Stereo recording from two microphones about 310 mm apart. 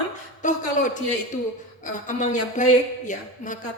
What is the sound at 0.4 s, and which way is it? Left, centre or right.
A woman's voice, left.